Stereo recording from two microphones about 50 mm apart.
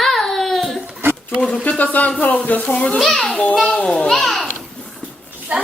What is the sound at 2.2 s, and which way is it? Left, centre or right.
Speech, left.